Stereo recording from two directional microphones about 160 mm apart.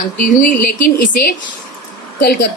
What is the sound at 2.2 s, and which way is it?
Speech, 75° left (ahead or behind).